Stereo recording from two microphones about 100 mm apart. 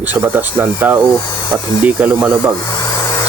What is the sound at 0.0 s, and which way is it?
Speech, 20° right (ahead or behind).